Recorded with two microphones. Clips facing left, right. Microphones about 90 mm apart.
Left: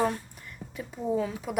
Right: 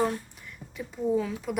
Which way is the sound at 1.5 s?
45° left (ahead or behind).